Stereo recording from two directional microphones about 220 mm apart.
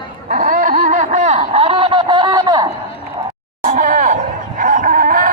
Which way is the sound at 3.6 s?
40° right (ahead or behind).